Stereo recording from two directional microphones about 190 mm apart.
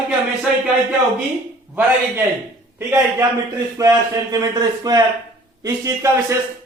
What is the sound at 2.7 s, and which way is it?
A man's voice, 15° right (ahead or behind).